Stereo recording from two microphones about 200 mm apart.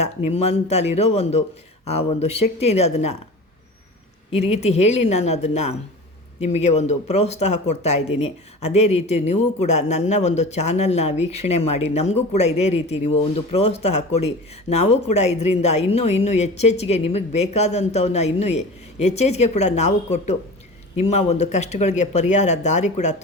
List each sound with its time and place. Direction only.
0.3 s speech: 30° left (ahead or behind)
4.3 s speech: 35° left (ahead or behind)
14.7 s speech: 30° left (ahead or behind)